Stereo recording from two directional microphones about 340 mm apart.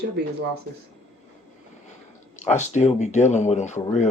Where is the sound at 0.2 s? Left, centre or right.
Right.